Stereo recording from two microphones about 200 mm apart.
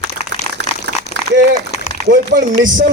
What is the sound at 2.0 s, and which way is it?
Speech, 45° right (ahead or behind).